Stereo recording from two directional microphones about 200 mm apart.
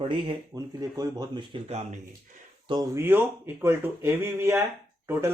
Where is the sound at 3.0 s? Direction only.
10° right (ahead or behind).